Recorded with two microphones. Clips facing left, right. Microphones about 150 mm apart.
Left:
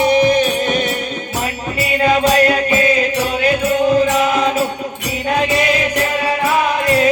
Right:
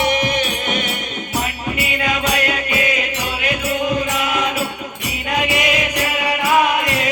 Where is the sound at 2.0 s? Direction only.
35° left (ahead or behind).